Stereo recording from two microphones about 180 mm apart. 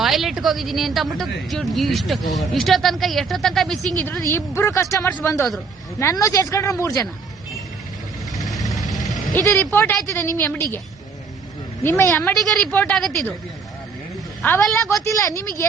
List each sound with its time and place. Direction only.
0.0 s a woman's voice: centre (ahead or behind); by 7.1 s 20° left (ahead or behind)
8.4 s vehicle: centre (ahead or behind)
8.7 s a sound: centre (ahead or behind)
9.3 s speech: 10° left (ahead or behind)
11.8 s speech: 10° left (ahead or behind)
14.4 s speech: 10° left (ahead or behind)